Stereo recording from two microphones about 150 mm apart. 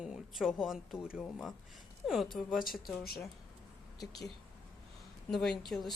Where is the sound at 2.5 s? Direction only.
Centre (ahead or behind).